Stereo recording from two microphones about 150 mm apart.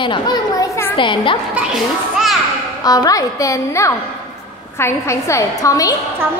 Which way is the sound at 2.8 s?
25° left (ahead or behind).